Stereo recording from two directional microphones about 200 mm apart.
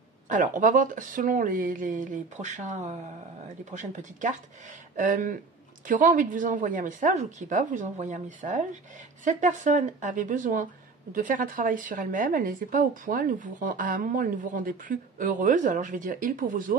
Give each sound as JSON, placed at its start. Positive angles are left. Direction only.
{"t": 0.3, "sound": "a woman's voice", "side_deg": -40}